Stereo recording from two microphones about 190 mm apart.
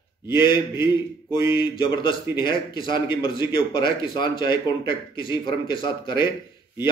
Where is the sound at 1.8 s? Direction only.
25° left (ahead or behind).